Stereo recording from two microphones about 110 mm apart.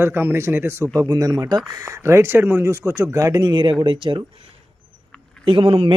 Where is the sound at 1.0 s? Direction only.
30° right (ahead or behind).